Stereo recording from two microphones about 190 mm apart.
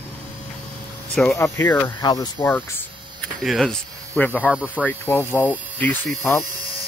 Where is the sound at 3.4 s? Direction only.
Centre (ahead or behind).